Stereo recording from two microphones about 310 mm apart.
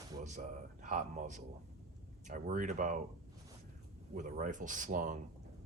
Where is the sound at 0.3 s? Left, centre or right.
Right.